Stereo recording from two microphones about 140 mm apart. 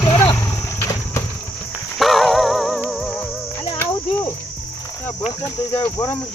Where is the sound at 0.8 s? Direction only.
20° left (ahead or behind).